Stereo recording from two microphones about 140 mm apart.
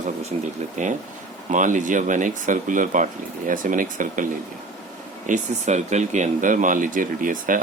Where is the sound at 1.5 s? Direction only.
65° right (ahead or behind).